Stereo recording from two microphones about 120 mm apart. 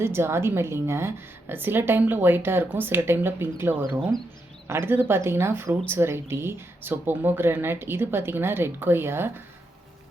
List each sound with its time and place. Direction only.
0.0 s a woman's voice: 20° right (ahead or behind)